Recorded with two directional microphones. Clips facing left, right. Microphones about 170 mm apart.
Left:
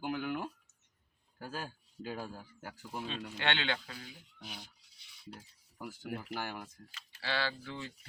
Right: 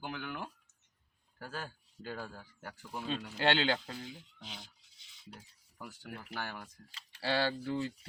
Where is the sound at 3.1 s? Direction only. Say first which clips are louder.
Right 6 dB; 35° right (ahead or behind).